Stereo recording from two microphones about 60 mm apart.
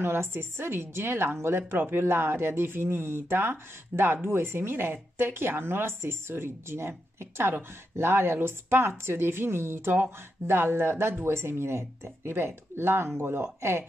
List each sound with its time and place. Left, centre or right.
0.0 s speech: right